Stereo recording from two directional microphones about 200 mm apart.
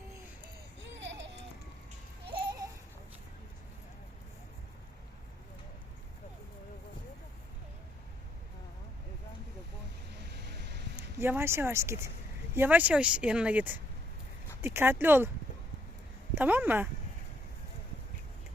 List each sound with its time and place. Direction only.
0.8 s laughter: 65° right (ahead or behind)
10.4 s a sound: 60° right (ahead or behind)
11.2 s speech: 10° right (ahead or behind)
16.3 s speech: 10° right (ahead or behind)